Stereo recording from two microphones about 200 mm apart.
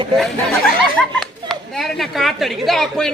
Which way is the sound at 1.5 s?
Centre (ahead or behind).